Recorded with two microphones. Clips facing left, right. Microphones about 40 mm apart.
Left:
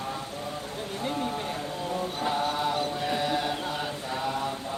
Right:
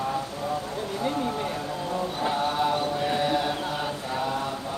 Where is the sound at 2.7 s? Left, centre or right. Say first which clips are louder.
Right 3 dB; centre.